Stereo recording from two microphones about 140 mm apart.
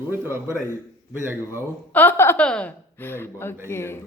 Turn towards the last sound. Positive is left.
turn(degrees=15)  # may be behind; listen again after turning